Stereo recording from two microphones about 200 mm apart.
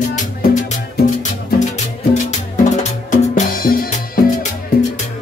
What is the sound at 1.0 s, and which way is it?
Music, 35° left (ahead or behind).